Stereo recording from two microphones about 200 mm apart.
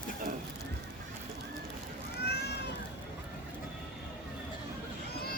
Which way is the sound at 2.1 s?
55° left (ahead or behind).